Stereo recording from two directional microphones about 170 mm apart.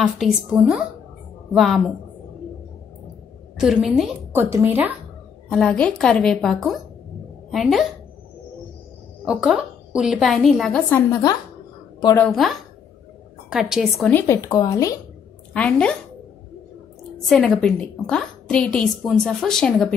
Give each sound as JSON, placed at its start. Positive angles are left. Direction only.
{"t": 0.0, "sound": "a woman's voice", "side_deg": 0}
{"t": 3.5, "sound": "a woman's voice", "side_deg": -5}
{"t": 5.5, "sound": "a woman's voice", "side_deg": 5}
{"t": 9.2, "sound": "a woman's voice", "side_deg": -5}
{"t": 12.2, "sound": "a woman's voice", "side_deg": 0}
{"t": 14.1, "sound": "speech", "side_deg": 20}
{"t": 15.5, "sound": "a woman's voice", "side_deg": 5}
{"t": 17.3, "sound": "a woman's voice", "side_deg": 0}